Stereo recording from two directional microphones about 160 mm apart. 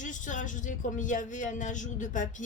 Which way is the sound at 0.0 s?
50° left (ahead or behind).